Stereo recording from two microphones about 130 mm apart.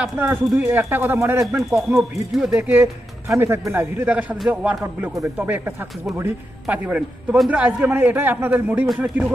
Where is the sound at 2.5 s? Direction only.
15° right (ahead or behind).